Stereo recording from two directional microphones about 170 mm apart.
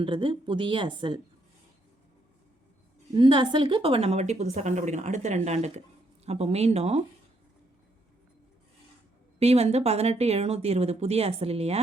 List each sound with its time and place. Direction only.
0.0 s a woman's voice: 30° right (ahead or behind)
3.2 s a woman's voice: 30° right (ahead or behind)
9.4 s a woman's voice: 40° right (ahead or behind)